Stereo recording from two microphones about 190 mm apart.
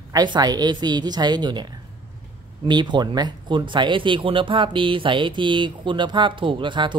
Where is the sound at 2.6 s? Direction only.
25° right (ahead or behind).